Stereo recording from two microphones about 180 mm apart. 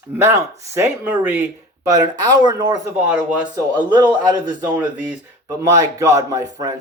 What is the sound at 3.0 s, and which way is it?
Speech, 10° right (ahead or behind).